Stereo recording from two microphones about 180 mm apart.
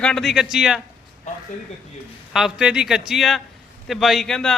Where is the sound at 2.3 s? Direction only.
5° right (ahead or behind).